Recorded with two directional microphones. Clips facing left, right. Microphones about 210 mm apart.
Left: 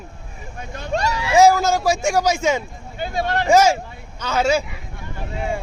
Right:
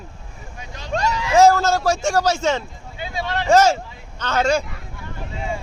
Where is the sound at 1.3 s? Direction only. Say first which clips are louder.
Even; 10° left (ahead or behind).